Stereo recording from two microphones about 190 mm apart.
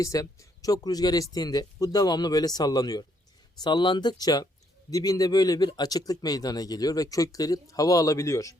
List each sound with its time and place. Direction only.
0.0 s speech: 15° left (ahead or behind)